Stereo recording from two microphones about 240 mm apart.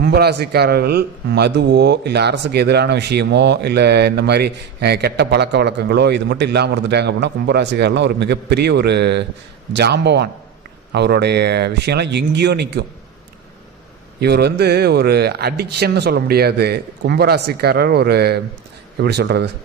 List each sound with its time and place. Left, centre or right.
0.0 s a man's voice: right
14.2 s a man's voice: right